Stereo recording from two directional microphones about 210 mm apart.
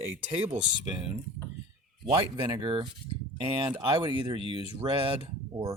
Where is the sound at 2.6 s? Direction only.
20° right (ahead or behind).